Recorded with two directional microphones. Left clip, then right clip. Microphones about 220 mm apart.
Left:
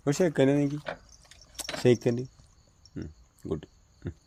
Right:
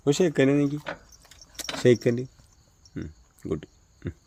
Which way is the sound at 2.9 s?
25° right (ahead or behind).